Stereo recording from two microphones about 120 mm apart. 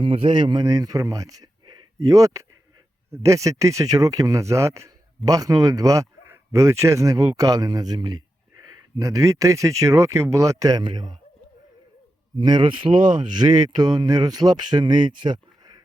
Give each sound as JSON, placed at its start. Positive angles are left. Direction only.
{"t": 0.0, "sound": "speech", "side_deg": -50}
{"t": 1.6, "sound": "a sound", "side_deg": -30}
{"t": 3.1, "sound": "speech", "side_deg": -25}
{"t": 12.4, "sound": "speech", "side_deg": -40}